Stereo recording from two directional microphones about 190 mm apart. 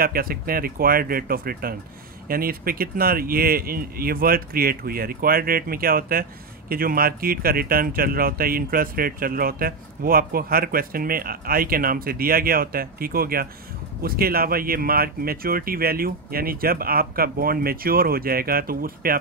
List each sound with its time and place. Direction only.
0.0 s speech: 50° right (ahead or behind)